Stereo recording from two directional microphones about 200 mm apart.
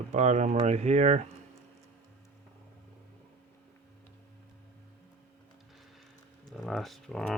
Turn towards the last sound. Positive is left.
turn(degrees=0)  # may be behind; listen again after turning